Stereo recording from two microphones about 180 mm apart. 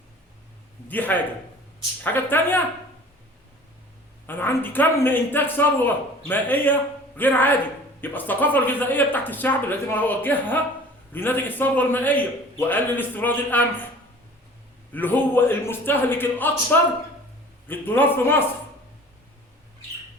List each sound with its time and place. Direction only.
0.9 s a man's voice: 10° left (ahead or behind)
4.3 s a man's voice: 10° left (ahead or behind)
14.9 s a man's voice: 10° left (ahead or behind)